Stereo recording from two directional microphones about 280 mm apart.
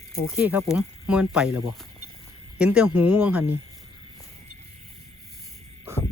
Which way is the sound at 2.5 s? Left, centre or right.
Centre.